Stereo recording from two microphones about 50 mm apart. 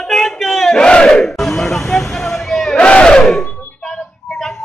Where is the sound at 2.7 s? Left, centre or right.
Left.